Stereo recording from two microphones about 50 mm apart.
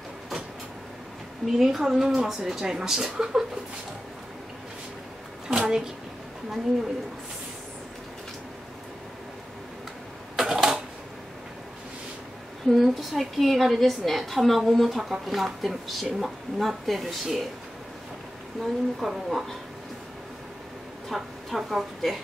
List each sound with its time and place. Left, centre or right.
1.4 s a woman's voice: centre
5.5 s a sound: centre
10.3 s a sound: centre
12.7 s speech: centre
18.6 s a woman's voice: centre
21.1 s speech: centre